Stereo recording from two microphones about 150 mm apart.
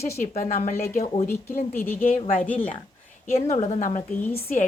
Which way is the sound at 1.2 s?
15° left (ahead or behind).